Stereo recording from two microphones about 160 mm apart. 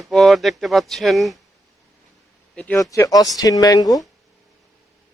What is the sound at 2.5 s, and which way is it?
Speech, 10° left (ahead or behind).